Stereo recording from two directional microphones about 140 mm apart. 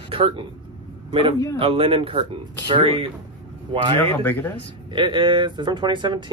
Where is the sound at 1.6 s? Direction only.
40° right (ahead or behind).